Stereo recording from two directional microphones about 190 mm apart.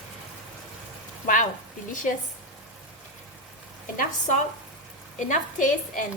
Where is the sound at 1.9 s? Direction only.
45° left (ahead or behind).